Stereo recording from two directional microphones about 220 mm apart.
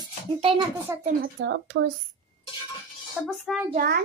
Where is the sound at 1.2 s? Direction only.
55° right (ahead or behind).